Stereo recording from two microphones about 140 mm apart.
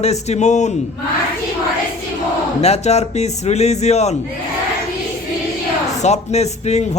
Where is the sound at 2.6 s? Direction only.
50° left (ahead or behind).